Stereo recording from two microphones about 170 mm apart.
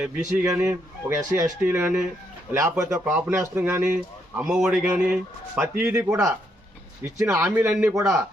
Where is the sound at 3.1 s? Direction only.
5° right (ahead or behind).